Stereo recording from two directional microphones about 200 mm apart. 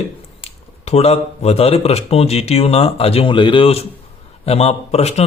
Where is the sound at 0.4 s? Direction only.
30° left (ahead or behind).